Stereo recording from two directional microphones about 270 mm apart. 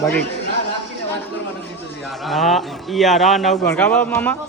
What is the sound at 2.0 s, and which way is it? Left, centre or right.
A man's voice, centre.